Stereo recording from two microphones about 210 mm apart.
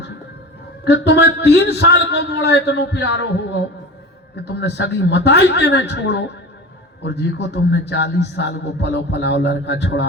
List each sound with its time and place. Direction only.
0.9 s a man's voice: 55° left (ahead or behind)